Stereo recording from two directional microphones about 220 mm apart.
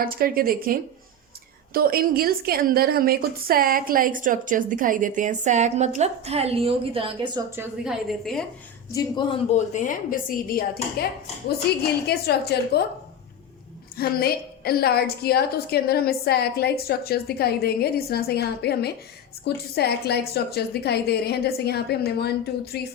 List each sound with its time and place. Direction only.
0.0 s a woman's voice: 40° right (ahead or behind); by 7.4 s 25° right (ahead or behind)
7.5 s a woman's voice: 5° right (ahead or behind)
8.9 s a woman's voice: 20° left (ahead or behind)
9.7 s speech: 35° left (ahead or behind)
12.0 s a woman's voice: 45° left (ahead or behind)
13.9 s a woman's voice: 45° left (ahead or behind)